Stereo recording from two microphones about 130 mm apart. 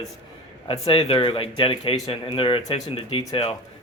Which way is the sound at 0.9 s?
40° left (ahead or behind).